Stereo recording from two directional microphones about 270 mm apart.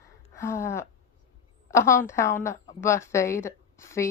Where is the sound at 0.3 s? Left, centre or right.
Centre.